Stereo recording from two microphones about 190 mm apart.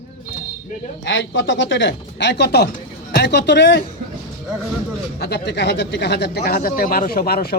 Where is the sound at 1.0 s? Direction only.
75° left (ahead or behind).